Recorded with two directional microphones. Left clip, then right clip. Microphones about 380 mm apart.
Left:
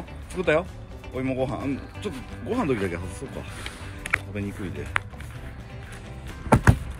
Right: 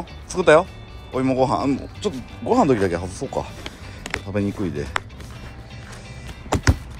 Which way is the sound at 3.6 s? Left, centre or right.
Centre.